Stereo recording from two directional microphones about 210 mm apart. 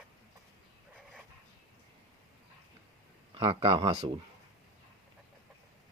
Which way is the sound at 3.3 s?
25° right (ahead or behind).